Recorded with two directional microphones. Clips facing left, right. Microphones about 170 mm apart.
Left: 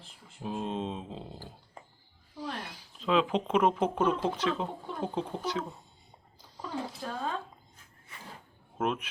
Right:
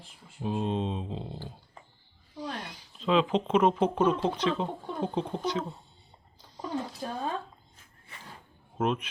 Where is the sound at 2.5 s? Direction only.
5° left (ahead or behind).